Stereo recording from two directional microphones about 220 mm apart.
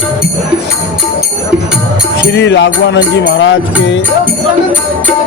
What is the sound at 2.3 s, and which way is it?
Music, 55° left (ahead or behind).